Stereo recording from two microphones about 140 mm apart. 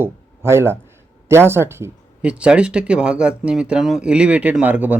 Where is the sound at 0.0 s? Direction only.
15° right (ahead or behind).